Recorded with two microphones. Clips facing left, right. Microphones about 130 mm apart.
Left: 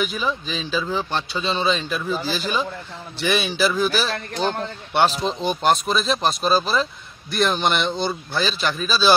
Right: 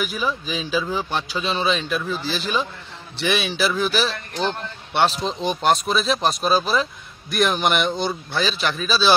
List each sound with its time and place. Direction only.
0.0 s speech: 5° right (ahead or behind)
4.1 s speech: 40° left (ahead or behind)
4.9 s speech: centre (ahead or behind)